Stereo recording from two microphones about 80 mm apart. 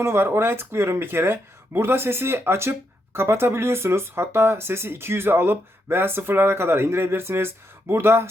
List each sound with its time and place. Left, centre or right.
0.0 s speech: right